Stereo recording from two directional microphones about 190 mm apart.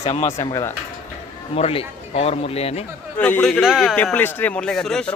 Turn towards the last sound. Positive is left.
turn(degrees=5)  # may be behind; listen again after turning